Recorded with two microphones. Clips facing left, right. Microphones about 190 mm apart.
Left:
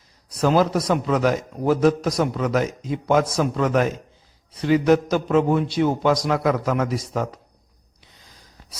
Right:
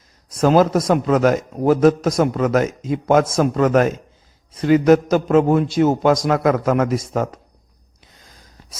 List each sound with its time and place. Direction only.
0.3 s a man's voice: 45° right (ahead or behind)